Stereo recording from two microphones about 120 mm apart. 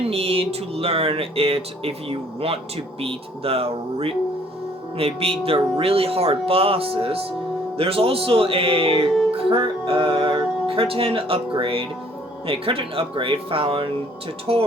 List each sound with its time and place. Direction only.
0.0 s music: 55° right (ahead or behind)